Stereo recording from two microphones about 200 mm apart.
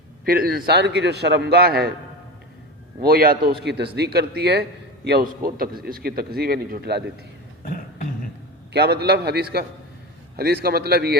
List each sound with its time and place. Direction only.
0.3 s speech: 45° right (ahead or behind)
3.0 s speech: 45° right (ahead or behind)
7.6 s a sound: 40° left (ahead or behind)
8.7 s speech: 55° right (ahead or behind)